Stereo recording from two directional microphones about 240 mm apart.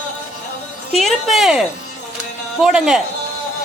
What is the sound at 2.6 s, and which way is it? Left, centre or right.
Speech, centre.